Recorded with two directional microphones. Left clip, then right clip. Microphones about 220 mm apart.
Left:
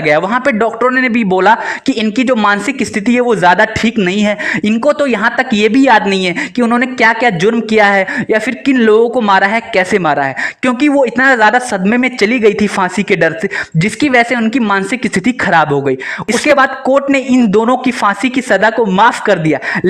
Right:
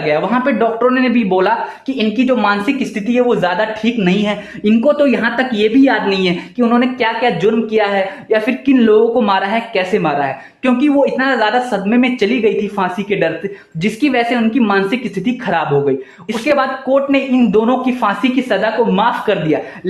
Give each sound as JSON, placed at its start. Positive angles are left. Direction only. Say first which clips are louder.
{"t": 0.0, "sound": "speech", "louder": "left 4 dB", "side_deg": 40}